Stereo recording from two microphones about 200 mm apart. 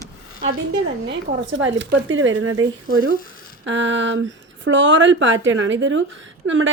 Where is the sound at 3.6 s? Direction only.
65° right (ahead or behind).